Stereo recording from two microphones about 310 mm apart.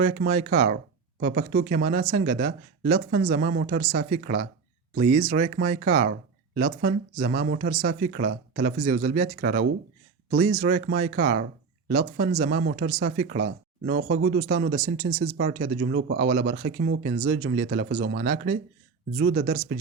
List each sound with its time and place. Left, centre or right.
0.0 s speech: right